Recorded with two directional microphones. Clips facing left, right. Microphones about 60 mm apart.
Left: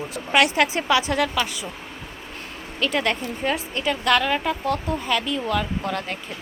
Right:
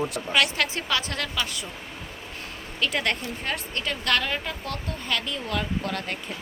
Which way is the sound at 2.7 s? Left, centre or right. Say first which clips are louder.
Left 3 dB; centre.